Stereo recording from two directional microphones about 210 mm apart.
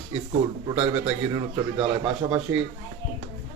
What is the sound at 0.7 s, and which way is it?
Speech, 30° right (ahead or behind).